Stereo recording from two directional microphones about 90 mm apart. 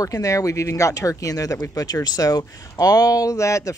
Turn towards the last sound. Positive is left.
turn(degrees=35)  # may be behind; listen again after turning